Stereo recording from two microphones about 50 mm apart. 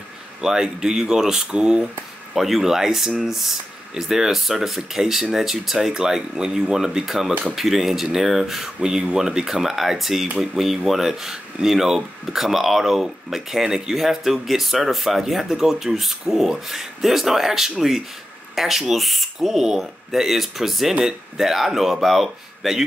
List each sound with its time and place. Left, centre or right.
0.4 s speech: centre
1.5 s speech: right
2.3 s speech: centre